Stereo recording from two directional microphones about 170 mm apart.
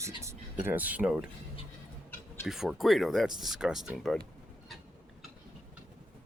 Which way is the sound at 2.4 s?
Centre (ahead or behind).